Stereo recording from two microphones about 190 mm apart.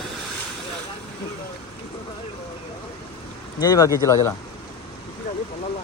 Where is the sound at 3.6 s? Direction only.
20° left (ahead or behind).